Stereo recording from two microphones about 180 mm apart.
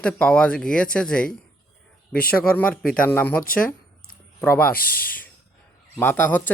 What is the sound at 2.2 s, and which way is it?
Speech, 55° left (ahead or behind).